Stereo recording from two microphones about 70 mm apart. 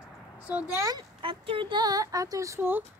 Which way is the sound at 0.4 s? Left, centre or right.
Centre.